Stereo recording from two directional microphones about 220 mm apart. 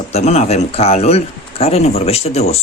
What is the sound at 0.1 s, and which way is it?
Speech, 30° left (ahead or behind).